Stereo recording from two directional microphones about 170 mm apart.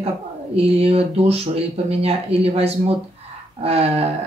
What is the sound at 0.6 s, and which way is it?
Speech, 35° right (ahead or behind).